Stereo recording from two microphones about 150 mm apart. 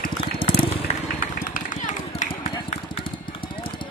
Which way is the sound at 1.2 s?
60° left (ahead or behind).